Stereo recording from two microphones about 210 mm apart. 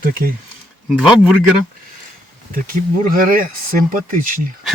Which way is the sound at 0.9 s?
5° right (ahead or behind).